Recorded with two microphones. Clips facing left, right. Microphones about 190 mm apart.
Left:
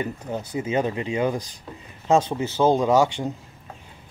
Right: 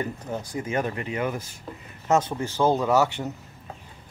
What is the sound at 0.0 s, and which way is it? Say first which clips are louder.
Speech: left 2 dB; 15° left (ahead or behind).